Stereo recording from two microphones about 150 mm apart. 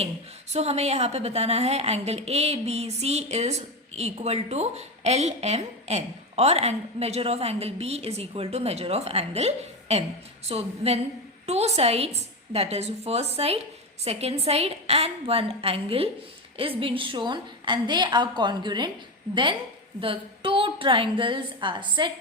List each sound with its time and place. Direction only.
0.5 s a woman's voice: 45° right (ahead or behind)